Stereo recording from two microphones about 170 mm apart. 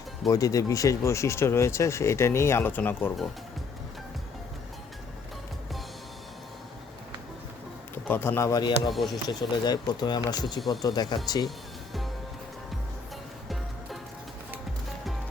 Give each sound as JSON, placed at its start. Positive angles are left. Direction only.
{"t": 0.3, "sound": "speech", "side_deg": 20}
{"t": 8.0, "sound": "speech", "side_deg": 10}
{"t": 8.9, "sound": "speech", "side_deg": 0}
{"t": 9.3, "sound": "speech", "side_deg": 25}